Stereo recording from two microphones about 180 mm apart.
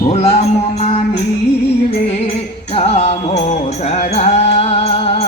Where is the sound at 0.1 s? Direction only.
35° left (ahead or behind).